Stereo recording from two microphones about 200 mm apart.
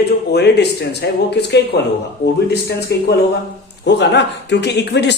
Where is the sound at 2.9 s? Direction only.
55° left (ahead or behind).